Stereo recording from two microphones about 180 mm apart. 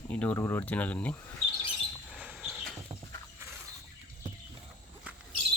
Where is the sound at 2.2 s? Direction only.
5° right (ahead or behind).